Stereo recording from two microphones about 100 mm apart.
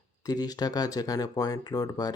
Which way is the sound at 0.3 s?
40° left (ahead or behind).